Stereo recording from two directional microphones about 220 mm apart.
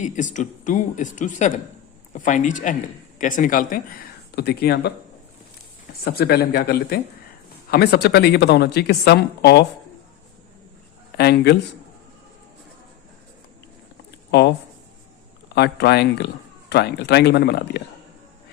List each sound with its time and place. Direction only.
0.0 s a woman's voice: 35° left (ahead or behind)
6.1 s a man's voice: 45° left (ahead or behind)
11.2 s a man's voice: 45° left (ahead or behind)
14.3 s speech: 50° left (ahead or behind)
15.5 s a man's voice: 50° left (ahead or behind)